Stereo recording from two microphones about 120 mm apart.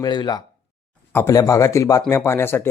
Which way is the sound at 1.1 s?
25° left (ahead or behind).